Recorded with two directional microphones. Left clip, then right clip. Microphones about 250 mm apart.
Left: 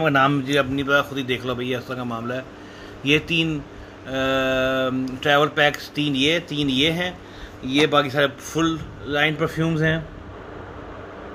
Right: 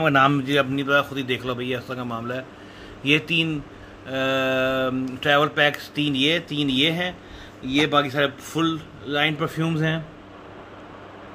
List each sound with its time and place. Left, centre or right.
0.0 s speech: centre